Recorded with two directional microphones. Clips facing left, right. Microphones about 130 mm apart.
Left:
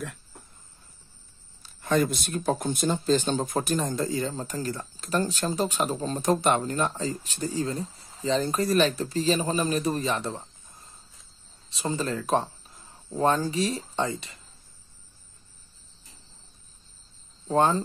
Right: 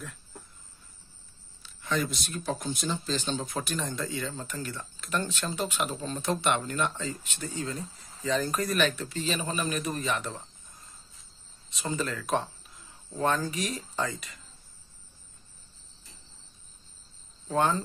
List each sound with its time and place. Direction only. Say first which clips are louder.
1.6 s speech: left 6 dB; 50° left (ahead or behind); by 14.4 s 30° left (ahead or behind)
17.5 s speech: left 4 dB; 35° left (ahead or behind)